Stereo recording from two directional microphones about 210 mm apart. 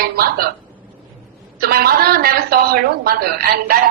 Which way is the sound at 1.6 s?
45° right (ahead or behind).